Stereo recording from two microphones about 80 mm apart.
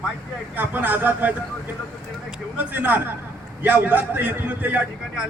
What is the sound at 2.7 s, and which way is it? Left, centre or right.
A man's voice, right.